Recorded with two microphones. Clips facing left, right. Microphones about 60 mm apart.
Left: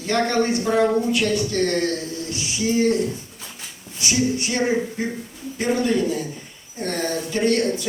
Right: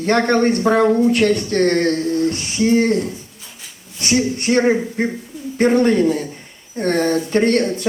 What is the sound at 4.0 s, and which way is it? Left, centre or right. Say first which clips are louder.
Speech: right 3 dB; right.